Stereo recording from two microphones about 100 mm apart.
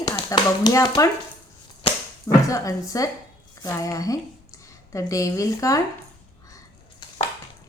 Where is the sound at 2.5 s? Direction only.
35° left (ahead or behind).